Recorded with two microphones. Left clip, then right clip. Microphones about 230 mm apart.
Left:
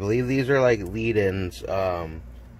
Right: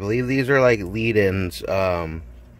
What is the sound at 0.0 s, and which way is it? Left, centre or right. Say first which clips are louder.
Speech: right 2 dB; centre.